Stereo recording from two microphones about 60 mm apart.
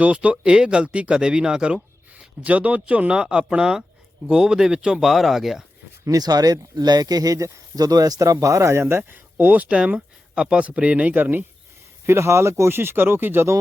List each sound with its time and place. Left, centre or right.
0.0 s speech: right; by 5.6 s centre
6.1 s speech: right
8.7 s speech: right
12.0 s speech: right